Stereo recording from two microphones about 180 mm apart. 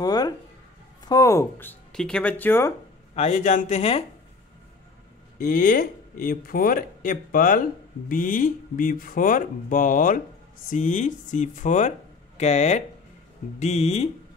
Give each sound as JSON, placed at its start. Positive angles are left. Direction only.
{"t": 0.0, "sound": "a sound", "side_deg": 20}
{"t": 1.0, "sound": "speech", "side_deg": 20}
{"t": 3.2, "sound": "speech", "side_deg": 40}
{"t": 5.4, "sound": "speech", "side_deg": 50}